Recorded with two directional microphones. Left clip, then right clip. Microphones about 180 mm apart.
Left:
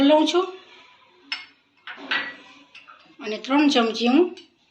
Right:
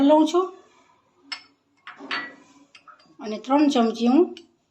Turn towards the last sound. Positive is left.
turn(degrees=-55)  # may be behind; listen again after turning